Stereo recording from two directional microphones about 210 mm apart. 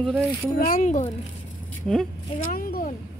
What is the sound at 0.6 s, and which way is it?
Speech, 40° left (ahead or behind).